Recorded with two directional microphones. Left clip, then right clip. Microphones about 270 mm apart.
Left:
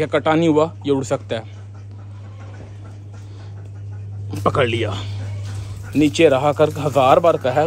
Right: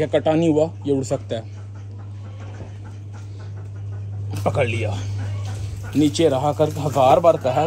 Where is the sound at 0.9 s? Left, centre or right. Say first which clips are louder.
Left 2 dB; left.